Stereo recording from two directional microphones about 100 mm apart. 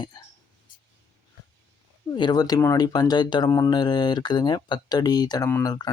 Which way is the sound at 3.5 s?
30° left (ahead or behind).